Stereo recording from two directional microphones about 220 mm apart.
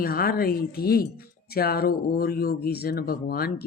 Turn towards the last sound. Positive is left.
turn(degrees=45)  # may be behind; listen again after turning